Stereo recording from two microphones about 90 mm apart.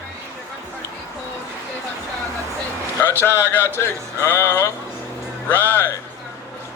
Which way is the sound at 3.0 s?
25° left (ahead or behind).